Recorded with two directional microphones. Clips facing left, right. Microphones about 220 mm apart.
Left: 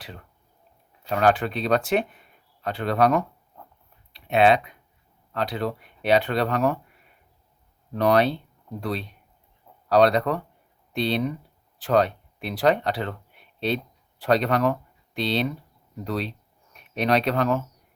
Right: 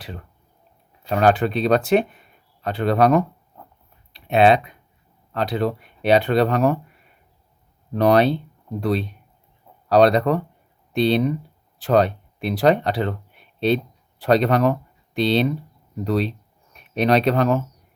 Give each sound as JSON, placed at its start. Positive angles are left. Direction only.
{"t": 1.0, "sound": "speech", "side_deg": -30}
{"t": 7.9, "sound": "speech", "side_deg": -30}
{"t": 14.2, "sound": "speech", "side_deg": -25}